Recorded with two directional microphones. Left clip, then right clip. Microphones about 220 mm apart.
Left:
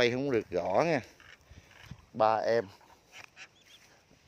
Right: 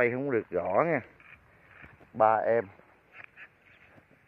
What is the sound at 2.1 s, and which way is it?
Speech, 5° left (ahead or behind).